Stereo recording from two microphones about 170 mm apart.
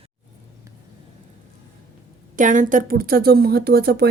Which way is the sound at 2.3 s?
50° right (ahead or behind).